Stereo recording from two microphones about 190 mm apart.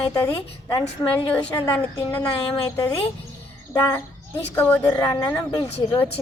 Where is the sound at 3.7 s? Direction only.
15° left (ahead or behind).